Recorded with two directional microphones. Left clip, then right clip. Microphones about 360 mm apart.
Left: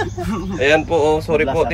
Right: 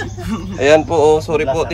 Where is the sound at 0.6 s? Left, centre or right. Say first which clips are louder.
Right 4 dB; centre.